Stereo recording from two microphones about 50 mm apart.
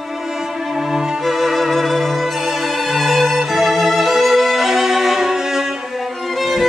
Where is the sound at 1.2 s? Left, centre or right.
Centre.